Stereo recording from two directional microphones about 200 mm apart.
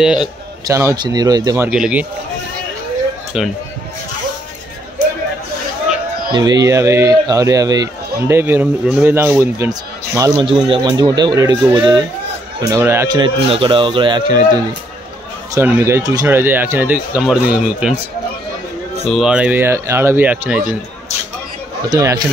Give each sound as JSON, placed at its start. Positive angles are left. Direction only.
{"t": 0.0, "sound": "a man's voice", "side_deg": -5}
{"t": 0.7, "sound": "speech", "side_deg": -15}
{"t": 1.7, "sound": "a man's voice", "side_deg": -5}
{"t": 3.3, "sound": "a man's voice", "side_deg": 0}
{"t": 6.3, "sound": "speech", "side_deg": -20}
{"t": 19.0, "sound": "speech", "side_deg": -5}
{"t": 21.8, "sound": "speech", "side_deg": -15}